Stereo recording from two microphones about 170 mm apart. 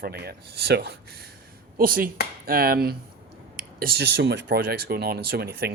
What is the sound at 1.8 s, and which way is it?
Speech, 60° right (ahead or behind).